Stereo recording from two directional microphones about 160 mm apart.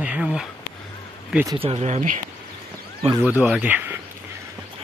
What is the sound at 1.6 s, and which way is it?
Speech, 40° right (ahead or behind).